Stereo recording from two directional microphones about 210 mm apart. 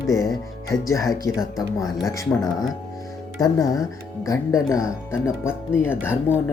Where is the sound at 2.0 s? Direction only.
15° left (ahead or behind).